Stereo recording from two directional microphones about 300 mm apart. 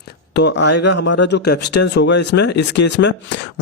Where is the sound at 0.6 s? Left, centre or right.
Left.